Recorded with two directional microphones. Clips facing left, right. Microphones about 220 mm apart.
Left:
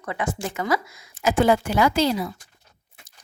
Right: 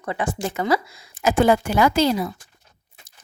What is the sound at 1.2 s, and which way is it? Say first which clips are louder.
A woman's voice: right 2 dB; 50° right (ahead or behind).